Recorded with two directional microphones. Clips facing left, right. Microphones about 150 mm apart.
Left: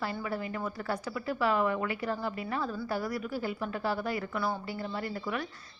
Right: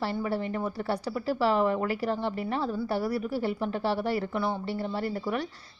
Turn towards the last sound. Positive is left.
turn(degrees=-35)  # may be behind; listen again after turning